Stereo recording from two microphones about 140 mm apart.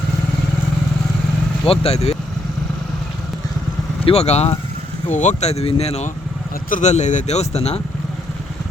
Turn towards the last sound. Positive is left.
turn(degrees=50)  # may be behind; listen again after turning